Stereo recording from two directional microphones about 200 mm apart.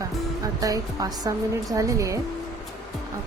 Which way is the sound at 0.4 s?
20° right (ahead or behind).